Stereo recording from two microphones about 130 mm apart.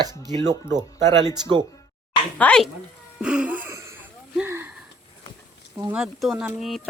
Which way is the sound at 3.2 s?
5° right (ahead or behind).